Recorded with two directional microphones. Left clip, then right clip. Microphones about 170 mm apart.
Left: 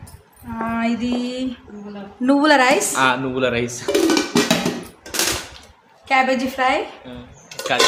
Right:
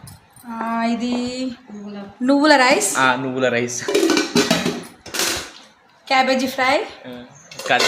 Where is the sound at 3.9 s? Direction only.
25° left (ahead or behind).